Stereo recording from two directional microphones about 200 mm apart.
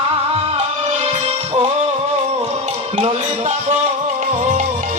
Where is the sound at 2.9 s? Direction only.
35° right (ahead or behind).